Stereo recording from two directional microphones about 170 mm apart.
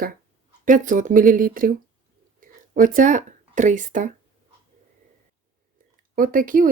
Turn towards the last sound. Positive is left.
turn(degrees=-55)  # may be behind; listen again after turning